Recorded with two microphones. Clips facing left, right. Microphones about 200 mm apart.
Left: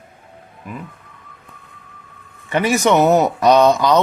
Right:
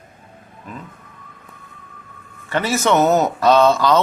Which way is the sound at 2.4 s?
15° left (ahead or behind).